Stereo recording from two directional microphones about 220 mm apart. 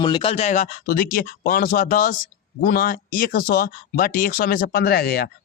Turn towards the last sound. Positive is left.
turn(degrees=45)  # may be behind; listen again after turning